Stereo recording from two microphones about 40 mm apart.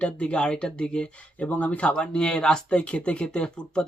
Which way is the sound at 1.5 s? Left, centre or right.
Left.